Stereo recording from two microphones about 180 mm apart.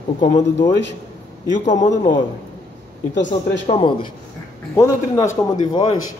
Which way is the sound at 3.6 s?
30° left (ahead or behind).